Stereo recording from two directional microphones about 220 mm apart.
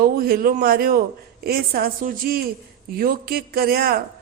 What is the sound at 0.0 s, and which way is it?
A man's voice, 40° right (ahead or behind).